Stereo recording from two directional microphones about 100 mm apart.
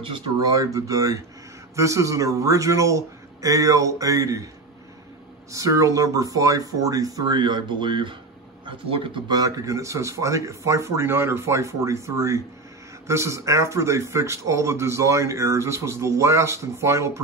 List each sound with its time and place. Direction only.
0.4 s speech: 35° right (ahead or behind)
5.5 s speech: 35° right (ahead or behind); by 9.2 s 60° right (ahead or behind)
9.3 s speech: 35° right (ahead or behind)